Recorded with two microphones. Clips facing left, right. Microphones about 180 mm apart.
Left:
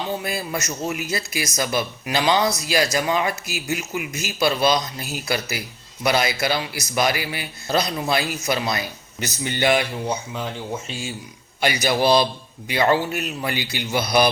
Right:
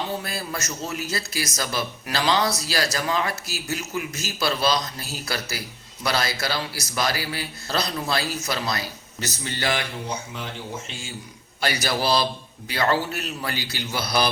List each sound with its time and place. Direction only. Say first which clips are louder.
0.2 s speech: left 4 dB; 15° left (ahead or behind)
11.6 s speech: left 5 dB; 15° left (ahead or behind)